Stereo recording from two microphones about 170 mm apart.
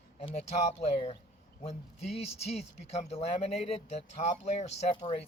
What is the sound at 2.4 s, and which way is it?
Speech, 40° left (ahead or behind).